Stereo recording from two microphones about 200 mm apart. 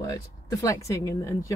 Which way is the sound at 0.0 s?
15° left (ahead or behind).